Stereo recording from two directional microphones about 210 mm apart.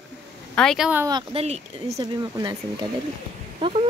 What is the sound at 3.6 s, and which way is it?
Speech, 25° right (ahead or behind).